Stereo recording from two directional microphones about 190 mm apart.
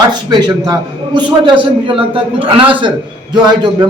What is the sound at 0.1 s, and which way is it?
A man's voice, 20° right (ahead or behind).